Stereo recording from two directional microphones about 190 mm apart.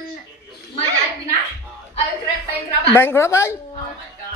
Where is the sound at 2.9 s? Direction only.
15° left (ahead or behind).